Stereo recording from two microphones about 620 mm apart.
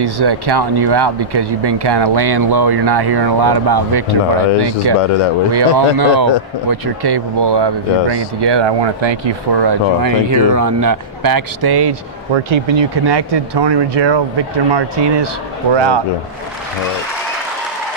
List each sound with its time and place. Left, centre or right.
0.0 s speech: right